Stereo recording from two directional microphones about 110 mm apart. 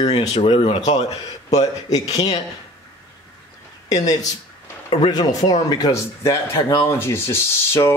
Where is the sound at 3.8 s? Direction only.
35° left (ahead or behind).